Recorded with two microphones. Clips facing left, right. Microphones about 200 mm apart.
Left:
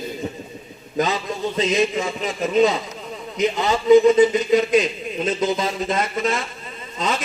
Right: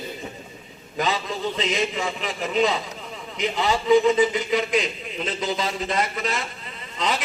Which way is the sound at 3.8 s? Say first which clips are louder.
Left 6 dB; 45° left (ahead or behind).